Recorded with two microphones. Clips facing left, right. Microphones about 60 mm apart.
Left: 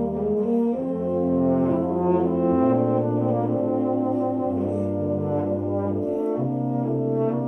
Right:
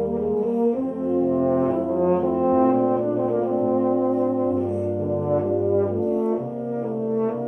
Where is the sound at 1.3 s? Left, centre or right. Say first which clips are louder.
Even; right.